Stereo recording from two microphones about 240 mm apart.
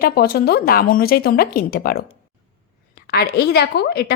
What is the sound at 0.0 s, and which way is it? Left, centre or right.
A woman's voice, left.